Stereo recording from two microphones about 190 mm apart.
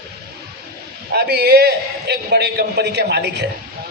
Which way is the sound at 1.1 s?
55° right (ahead or behind).